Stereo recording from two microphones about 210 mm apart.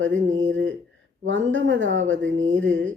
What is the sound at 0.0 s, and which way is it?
Speech, 65° right (ahead or behind).